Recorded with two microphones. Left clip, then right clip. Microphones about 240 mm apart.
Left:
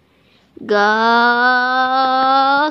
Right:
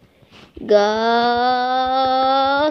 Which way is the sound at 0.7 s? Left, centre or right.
Left.